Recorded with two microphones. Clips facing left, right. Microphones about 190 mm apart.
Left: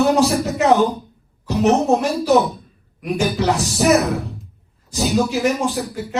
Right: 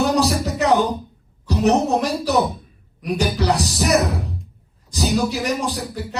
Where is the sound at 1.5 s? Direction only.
35° right (ahead or behind).